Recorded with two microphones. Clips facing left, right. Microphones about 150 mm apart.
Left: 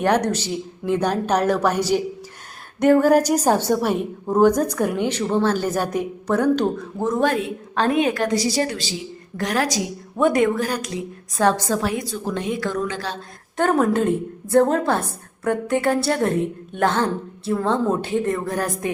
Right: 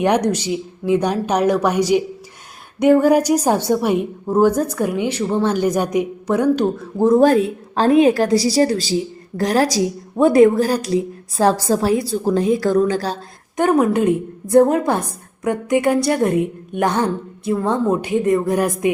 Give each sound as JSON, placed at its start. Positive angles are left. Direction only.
{"t": 0.0, "sound": "a woman's voice", "side_deg": -15}
{"t": 7.0, "sound": "a woman's voice", "side_deg": -35}
{"t": 13.6, "sound": "a woman's voice", "side_deg": -10}